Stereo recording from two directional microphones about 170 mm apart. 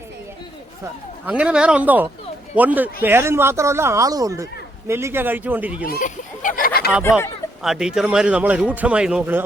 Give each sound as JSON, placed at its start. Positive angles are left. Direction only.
{"t": 1.2, "sound": "speech", "side_deg": -5}
{"t": 5.8, "sound": "a sound", "side_deg": 55}
{"t": 7.0, "sound": "speech", "side_deg": 15}
{"t": 7.6, "sound": "speech", "side_deg": 0}